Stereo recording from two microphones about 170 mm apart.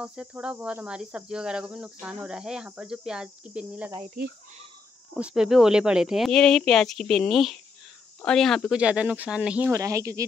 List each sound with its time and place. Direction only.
0.0 s cricket: 5° right (ahead or behind)
5.1 s cricket: 5° right (ahead or behind)
9.7 s speech: 20° right (ahead or behind)